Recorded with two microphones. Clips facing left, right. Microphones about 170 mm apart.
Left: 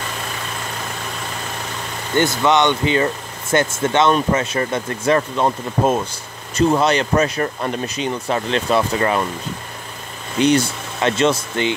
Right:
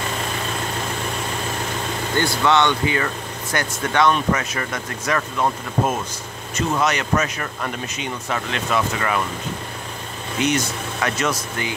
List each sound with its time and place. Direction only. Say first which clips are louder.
2.1 s speech: left 3 dB; 20° left (ahead or behind)
10.4 s speech: left 6 dB; 30° left (ahead or behind)